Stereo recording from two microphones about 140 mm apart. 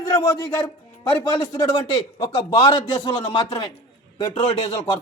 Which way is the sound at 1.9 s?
35° left (ahead or behind).